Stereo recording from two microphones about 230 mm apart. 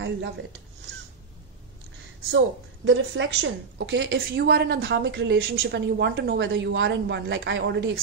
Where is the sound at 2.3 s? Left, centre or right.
Right.